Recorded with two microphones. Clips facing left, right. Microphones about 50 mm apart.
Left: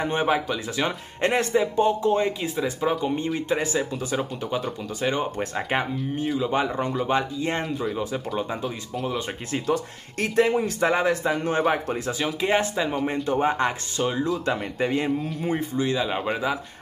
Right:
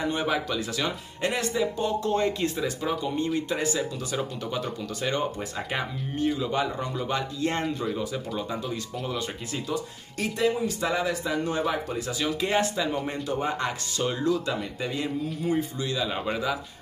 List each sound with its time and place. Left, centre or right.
0.0 s speech: left
0.3 s speech: centre
0.8 s speech: left; by 6.5 s centre
6.5 s speech: left
7.6 s speech: centre
9.5 s speech: left
10.8 s a man's voice: left
14.0 s speech: centre
14.4 s a man's voice: left